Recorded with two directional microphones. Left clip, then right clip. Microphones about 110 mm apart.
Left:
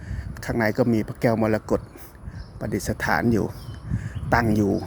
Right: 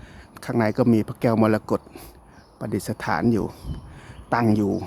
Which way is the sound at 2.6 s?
20° right (ahead or behind).